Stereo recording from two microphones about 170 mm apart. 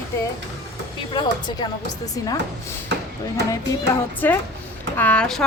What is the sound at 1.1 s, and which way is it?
Speech, 25° left (ahead or behind).